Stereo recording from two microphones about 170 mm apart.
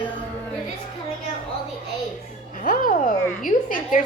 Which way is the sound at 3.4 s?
50° left (ahead or behind).